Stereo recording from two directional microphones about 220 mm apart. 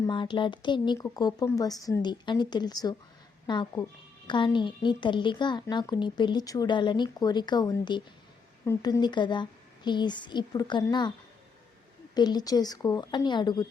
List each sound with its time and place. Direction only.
0.0 s a woman's voice: 20° left (ahead or behind)
12.1 s a woman's voice: 20° left (ahead or behind)